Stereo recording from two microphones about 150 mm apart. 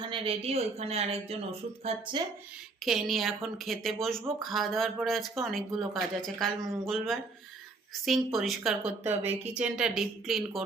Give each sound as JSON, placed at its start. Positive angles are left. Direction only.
{"t": 0.1, "sound": "speech", "side_deg": -40}
{"t": 2.8, "sound": "speech", "side_deg": 0}
{"t": 9.0, "sound": "speech", "side_deg": -15}